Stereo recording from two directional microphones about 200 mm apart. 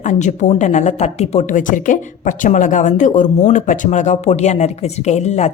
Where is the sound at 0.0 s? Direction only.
35° left (ahead or behind).